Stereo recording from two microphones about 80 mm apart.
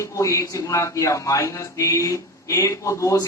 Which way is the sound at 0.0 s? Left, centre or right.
Left.